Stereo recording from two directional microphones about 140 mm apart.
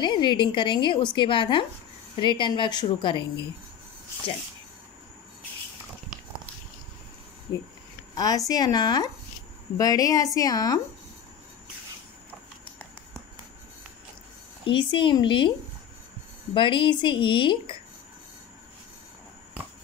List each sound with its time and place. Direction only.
0.0 s a woman's voice: 35° left (ahead or behind)
7.5 s speech: 25° left (ahead or behind)
14.7 s a woman's voice: 35° left (ahead or behind)
16.5 s a woman's voice: 35° left (ahead or behind)